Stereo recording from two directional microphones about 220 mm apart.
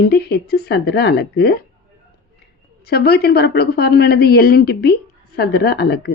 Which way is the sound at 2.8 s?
45° left (ahead or behind).